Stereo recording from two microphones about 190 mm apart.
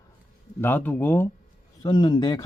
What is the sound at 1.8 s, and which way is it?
Speech, 20° left (ahead or behind).